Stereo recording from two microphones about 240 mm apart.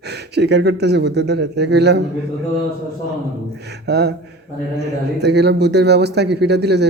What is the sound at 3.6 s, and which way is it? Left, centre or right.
A man's voice, right.